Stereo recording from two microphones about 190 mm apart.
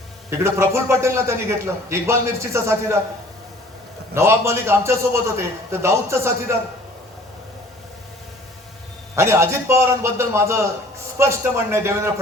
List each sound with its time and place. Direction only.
0.3 s a man's voice: 15° right (ahead or behind)
4.1 s a man's voice: 15° right (ahead or behind)
9.1 s a man's voice: 15° right (ahead or behind)